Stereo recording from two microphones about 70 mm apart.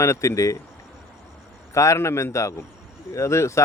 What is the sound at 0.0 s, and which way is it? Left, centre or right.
Speech, left.